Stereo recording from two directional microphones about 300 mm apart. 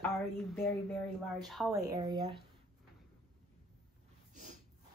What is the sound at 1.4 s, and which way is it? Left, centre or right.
Speech, centre.